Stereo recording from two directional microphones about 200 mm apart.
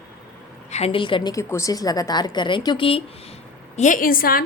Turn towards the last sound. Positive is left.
turn(degrees=45)  # may be behind; listen again after turning